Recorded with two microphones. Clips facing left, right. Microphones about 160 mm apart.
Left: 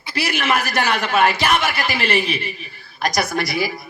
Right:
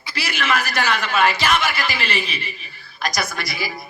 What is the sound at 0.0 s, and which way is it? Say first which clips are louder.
A man's voice: left 4 dB; 55° left (ahead or behind).